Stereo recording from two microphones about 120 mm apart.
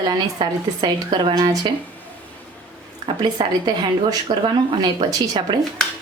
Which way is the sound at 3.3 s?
35° right (ahead or behind).